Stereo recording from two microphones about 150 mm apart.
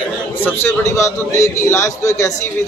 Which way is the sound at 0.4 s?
15° left (ahead or behind).